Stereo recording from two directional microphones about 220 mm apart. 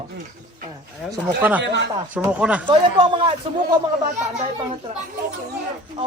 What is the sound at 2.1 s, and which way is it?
Speech, 5° right (ahead or behind).